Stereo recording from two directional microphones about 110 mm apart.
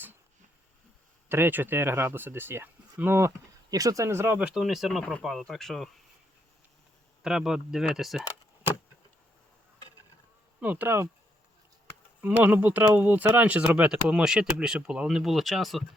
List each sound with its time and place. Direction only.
1.3 s speech: 20° right (ahead or behind)
4.4 s speech: 10° right (ahead or behind)
7.2 s speech: 5° right (ahead or behind)
10.6 s speech: 15° right (ahead or behind)
12.2 s speech: 15° right (ahead or behind)